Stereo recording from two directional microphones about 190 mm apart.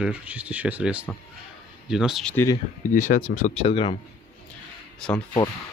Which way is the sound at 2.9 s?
45° left (ahead or behind).